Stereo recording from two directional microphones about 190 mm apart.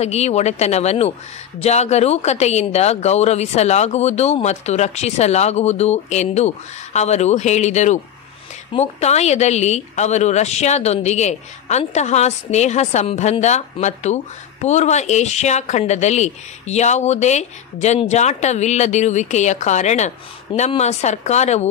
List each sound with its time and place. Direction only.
0.0 s a woman's voice: 35° left (ahead or behind)